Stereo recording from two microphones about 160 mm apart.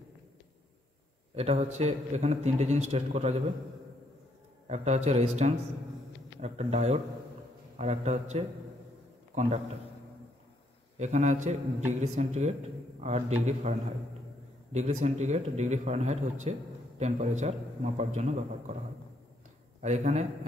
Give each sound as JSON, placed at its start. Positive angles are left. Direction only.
{"t": 1.3, "sound": "a man's voice", "side_deg": -40}
{"t": 4.6, "sound": "a man's voice", "side_deg": -45}
{"t": 11.0, "sound": "a man's voice", "side_deg": -45}
{"t": 19.8, "sound": "a man's voice", "side_deg": -45}